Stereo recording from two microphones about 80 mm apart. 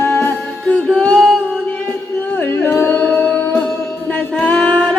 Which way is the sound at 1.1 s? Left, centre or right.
Centre.